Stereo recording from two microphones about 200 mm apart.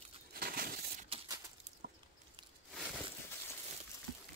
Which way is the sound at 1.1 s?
30° right (ahead or behind).